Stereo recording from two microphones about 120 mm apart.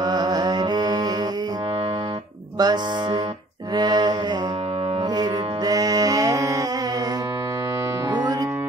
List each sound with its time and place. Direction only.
0.0 s music: 35° right (ahead or behind)
2.6 s music: 35° right (ahead or behind)
3.7 s mantra: 35° right (ahead or behind)
5.1 s music: 35° right (ahead or behind)
8.1 s music: 35° right (ahead or behind)